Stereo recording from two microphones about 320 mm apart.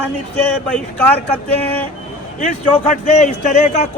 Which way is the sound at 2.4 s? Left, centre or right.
Left.